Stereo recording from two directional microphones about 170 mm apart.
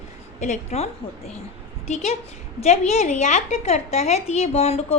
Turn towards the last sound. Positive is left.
turn(degrees=35)  # may be behind; listen again after turning